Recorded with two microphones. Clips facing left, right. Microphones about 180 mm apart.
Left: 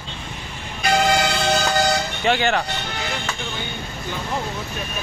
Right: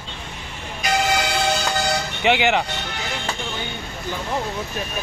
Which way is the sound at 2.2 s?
15° right (ahead or behind).